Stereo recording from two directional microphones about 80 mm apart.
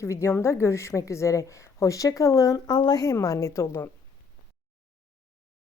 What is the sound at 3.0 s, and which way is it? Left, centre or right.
Speech, left.